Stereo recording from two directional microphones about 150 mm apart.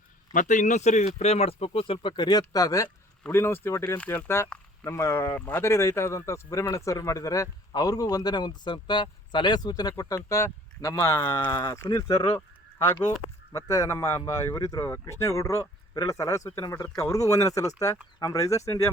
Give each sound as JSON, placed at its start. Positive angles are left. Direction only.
{"t": 0.3, "sound": "speech", "side_deg": 55}
{"t": 13.7, "sound": "speech", "side_deg": 20}